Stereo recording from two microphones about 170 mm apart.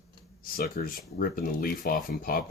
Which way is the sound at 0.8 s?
55° left (ahead or behind).